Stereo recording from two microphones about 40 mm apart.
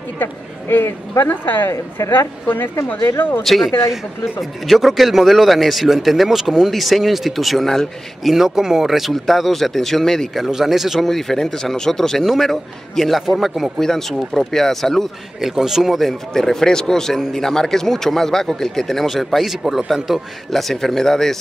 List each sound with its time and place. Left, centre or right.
0.2 s a woman's voice: left
3.4 s a man's voice: centre
8.2 s a man's voice: centre
10.3 s speech: centre
11.0 s a man's voice: centre
13.7 s speech: centre
15.4 s speech: centre
16.0 s speech: centre